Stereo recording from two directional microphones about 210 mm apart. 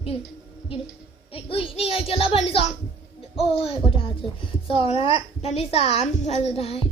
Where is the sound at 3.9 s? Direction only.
25° left (ahead or behind).